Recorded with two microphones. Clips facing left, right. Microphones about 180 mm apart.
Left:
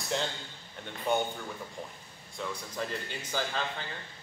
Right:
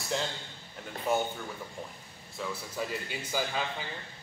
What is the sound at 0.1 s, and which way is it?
Speech, centre (ahead or behind).